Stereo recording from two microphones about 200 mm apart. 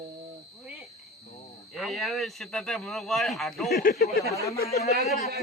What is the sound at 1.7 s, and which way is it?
Speech, centre (ahead or behind).